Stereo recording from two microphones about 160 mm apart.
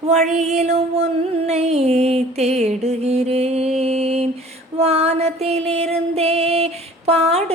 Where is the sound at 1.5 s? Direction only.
40° right (ahead or behind).